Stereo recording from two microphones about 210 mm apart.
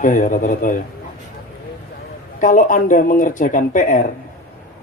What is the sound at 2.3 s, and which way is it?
Speech, 40° left (ahead or behind).